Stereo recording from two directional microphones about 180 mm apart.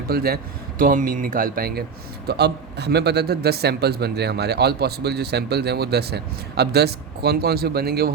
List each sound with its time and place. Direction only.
0.1 s a man's voice: 60° right (ahead or behind)